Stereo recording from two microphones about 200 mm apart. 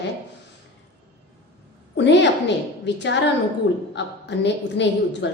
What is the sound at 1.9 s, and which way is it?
Speech, 60° left (ahead or behind).